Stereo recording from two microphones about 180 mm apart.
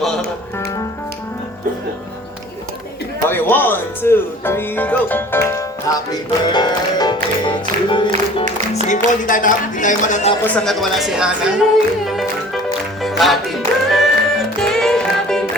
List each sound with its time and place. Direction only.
3.2 s speech: 10° left (ahead or behind); by 10.3 s 40° left (ahead or behind)
10.4 s speech: 5° left (ahead or behind)
13.0 s music: centre (ahead or behind)